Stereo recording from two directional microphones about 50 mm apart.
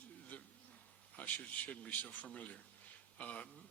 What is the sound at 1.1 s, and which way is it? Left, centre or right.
Speech, left.